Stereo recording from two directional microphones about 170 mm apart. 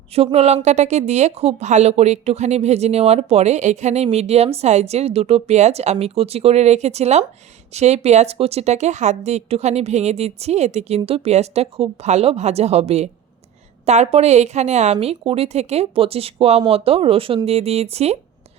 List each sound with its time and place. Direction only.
0.1 s a woman's voice: 35° right (ahead or behind)